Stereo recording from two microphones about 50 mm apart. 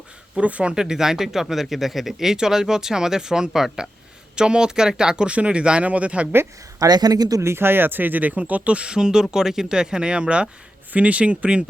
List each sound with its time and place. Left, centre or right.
0.3 s speech: right
0.8 s speech: centre
7.4 s speech: right